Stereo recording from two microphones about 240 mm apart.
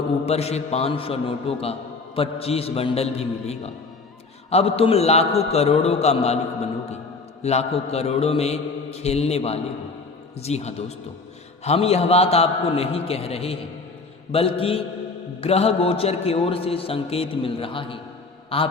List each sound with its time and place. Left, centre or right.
0.3 s a man's voice: left